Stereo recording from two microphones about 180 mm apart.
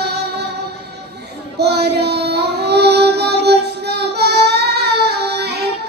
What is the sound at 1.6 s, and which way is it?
Child singing, 65° right (ahead or behind).